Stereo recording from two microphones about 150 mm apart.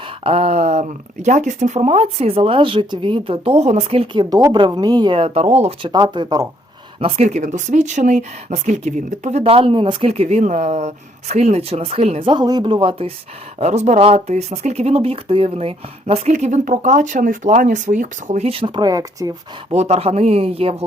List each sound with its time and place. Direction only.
0.3 s speech: 40° right (ahead or behind)
5.8 s speech: 30° right (ahead or behind)
7.0 s speech: 50° right (ahead or behind)
9.4 s speech: 40° right (ahead or behind)
13.6 s speech: 50° right (ahead or behind); by 19.3 s 25° right (ahead or behind)
19.7 s speech: 45° right (ahead or behind)